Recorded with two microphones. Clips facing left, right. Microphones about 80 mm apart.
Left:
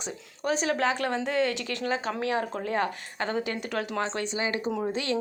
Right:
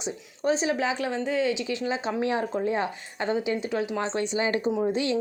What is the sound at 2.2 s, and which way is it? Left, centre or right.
Speech, right.